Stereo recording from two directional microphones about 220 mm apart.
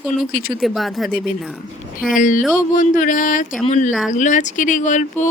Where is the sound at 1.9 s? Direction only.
40° left (ahead or behind).